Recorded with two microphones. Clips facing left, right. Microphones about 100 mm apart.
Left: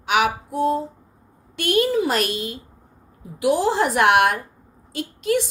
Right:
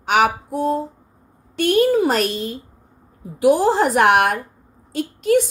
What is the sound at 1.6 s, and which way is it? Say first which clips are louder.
Speech: right 4 dB; 40° right (ahead or behind).